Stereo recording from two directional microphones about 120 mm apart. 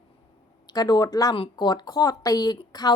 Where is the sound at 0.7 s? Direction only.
35° left (ahead or behind).